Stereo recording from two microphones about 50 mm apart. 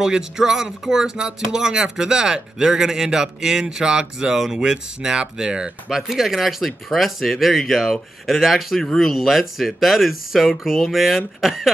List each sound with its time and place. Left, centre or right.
0.0 s speech: centre